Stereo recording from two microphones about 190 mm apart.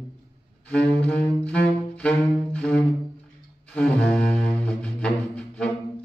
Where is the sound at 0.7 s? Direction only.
5° left (ahead or behind).